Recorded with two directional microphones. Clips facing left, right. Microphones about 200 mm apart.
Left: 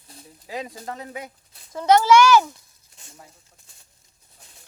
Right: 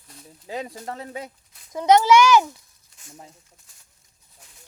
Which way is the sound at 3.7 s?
30° left (ahead or behind).